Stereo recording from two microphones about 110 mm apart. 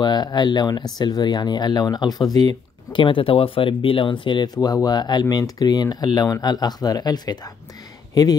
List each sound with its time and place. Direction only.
0.0 s speech: 40° left (ahead or behind)